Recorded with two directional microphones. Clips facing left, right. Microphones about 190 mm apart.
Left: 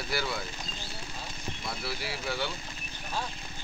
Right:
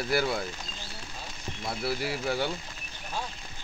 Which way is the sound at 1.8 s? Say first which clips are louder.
Right 8 dB; 50° right (ahead or behind).